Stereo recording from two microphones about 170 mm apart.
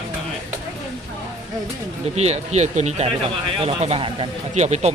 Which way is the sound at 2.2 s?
40° right (ahead or behind).